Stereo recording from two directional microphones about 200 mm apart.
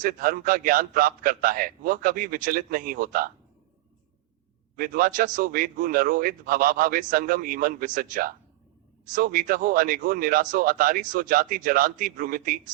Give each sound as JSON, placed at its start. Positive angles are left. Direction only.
{"t": 0.0, "sound": "a man's voice", "side_deg": -45}
{"t": 4.8, "sound": "a man's voice", "side_deg": -45}